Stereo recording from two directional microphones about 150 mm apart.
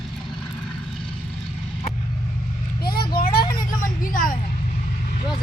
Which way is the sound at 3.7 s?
65° left (ahead or behind).